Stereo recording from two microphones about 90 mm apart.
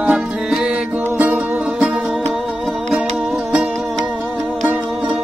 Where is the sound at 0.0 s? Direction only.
10° right (ahead or behind).